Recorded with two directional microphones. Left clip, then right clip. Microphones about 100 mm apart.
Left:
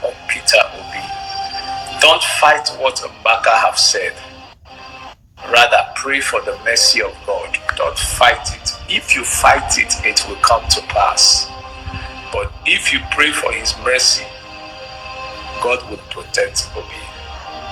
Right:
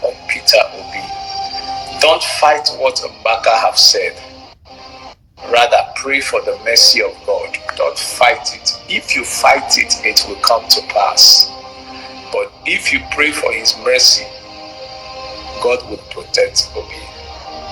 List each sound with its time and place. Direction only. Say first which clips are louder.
0.0 s music: right 3 dB; 25° right (ahead or behind)
5.5 s a man's voice: even; 25° right (ahead or behind)
15.1 s music: left 1 dB; 25° right (ahead or behind)